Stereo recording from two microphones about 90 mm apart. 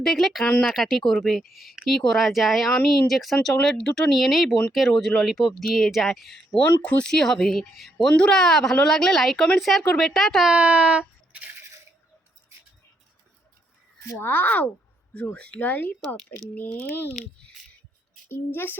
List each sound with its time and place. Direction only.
0.0 s speech: centre (ahead or behind)
6.8 s speech: 15° left (ahead or behind)
7.1 s speech: 5° left (ahead or behind)
10.5 s a sound: 15° right (ahead or behind)
14.2 s speech: 20° left (ahead or behind)
18.3 s speech: 25° left (ahead or behind)